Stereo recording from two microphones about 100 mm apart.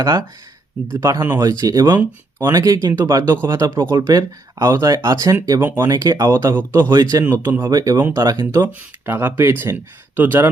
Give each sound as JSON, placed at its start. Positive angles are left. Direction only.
{"t": 0.0, "sound": "speech", "side_deg": -35}
{"t": 1.5, "sound": "speech", "side_deg": -40}
{"t": 5.5, "sound": "speech", "side_deg": -20}
{"t": 5.9, "sound": "speech", "side_deg": -35}
{"t": 6.9, "sound": "speech", "side_deg": -40}
{"t": 7.3, "sound": "speech", "side_deg": -25}
{"t": 7.6, "sound": "speech", "side_deg": -40}
{"t": 8.0, "sound": "speech", "side_deg": -25}